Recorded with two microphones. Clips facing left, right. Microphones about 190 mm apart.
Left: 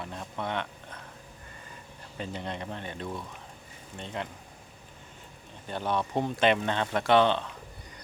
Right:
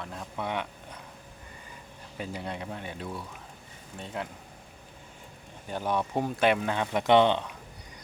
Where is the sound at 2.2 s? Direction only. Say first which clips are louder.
Even; 10° right (ahead or behind).